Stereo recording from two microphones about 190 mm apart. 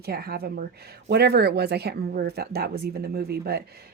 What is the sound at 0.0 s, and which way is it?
Speech, 55° right (ahead or behind).